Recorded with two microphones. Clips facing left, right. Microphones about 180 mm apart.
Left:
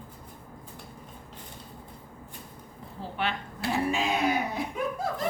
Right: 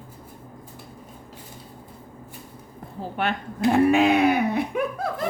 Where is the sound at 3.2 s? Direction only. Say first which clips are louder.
Right 5 dB; 50° right (ahead or behind).